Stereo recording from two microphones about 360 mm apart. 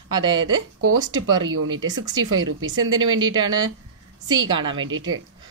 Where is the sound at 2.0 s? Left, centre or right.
Centre.